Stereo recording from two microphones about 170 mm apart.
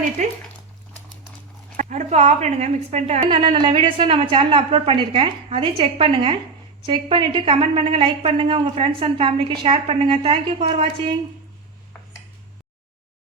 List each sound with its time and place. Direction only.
0.2 s speech: 45° right (ahead or behind)
1.7 s a woman's voice: 45° right (ahead or behind)
3.2 s a woman's voice: 30° right (ahead or behind)